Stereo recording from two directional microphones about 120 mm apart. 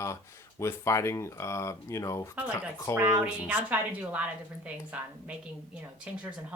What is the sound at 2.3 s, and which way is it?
A woman's voice, 10° right (ahead or behind).